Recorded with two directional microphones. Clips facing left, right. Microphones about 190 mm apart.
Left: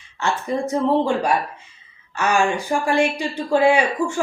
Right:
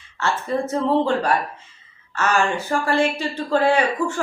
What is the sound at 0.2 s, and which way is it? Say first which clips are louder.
A woman's voice: even; 15° left (ahead or behind).